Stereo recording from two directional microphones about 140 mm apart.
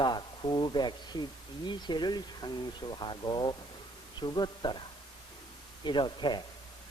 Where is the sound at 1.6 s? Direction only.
30° left (ahead or behind).